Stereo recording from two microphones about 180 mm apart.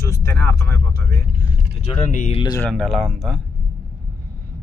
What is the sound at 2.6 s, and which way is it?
Speech, centre (ahead or behind).